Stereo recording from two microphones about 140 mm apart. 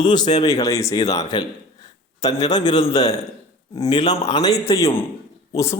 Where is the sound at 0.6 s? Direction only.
20° left (ahead or behind).